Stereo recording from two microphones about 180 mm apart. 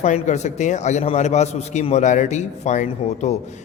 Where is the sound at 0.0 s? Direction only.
40° left (ahead or behind).